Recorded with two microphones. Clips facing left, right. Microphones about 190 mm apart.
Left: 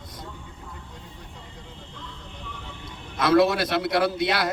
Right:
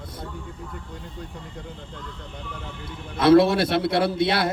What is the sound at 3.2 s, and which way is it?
A man's voice, 30° right (ahead or behind).